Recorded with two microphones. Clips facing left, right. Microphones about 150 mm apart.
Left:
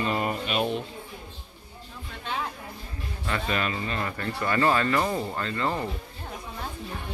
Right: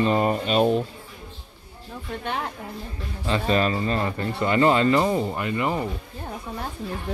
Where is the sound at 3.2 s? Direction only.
25° right (ahead or behind).